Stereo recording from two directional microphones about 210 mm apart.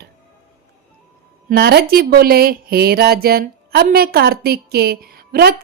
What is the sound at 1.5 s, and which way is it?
Speech, 50° right (ahead or behind).